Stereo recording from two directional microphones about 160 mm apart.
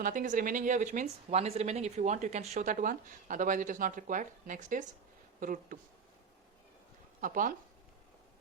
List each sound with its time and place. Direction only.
0.0 s speech: 60° right (ahead or behind)
7.2 s speech: 60° right (ahead or behind)